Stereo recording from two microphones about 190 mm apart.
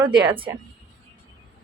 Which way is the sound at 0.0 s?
25° right (ahead or behind).